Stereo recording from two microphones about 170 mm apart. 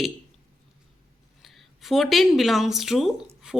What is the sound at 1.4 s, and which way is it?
Speech, centre (ahead or behind).